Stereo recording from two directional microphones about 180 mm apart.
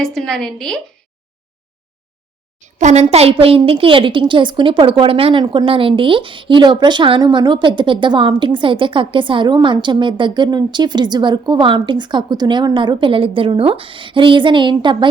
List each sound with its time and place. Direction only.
0.0 s a woman's voice: centre (ahead or behind)
2.6 s a woman's voice: 40° right (ahead or behind); by 14.9 s 25° right (ahead or behind)